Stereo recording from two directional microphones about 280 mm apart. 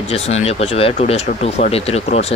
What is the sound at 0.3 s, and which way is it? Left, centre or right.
Speech, left.